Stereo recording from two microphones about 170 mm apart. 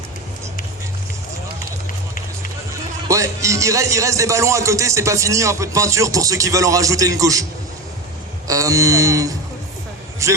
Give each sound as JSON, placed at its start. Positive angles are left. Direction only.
{"t": 3.1, "sound": "a man's voice", "side_deg": -20}
{"t": 8.4, "sound": "a sound", "side_deg": -20}
{"t": 10.2, "sound": "a man's voice", "side_deg": -20}